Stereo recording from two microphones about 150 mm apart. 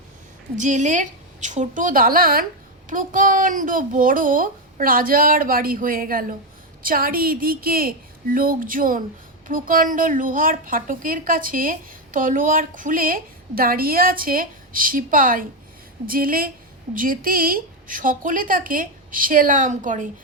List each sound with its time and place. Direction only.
0.5 s a child's voice: 55° right (ahead or behind)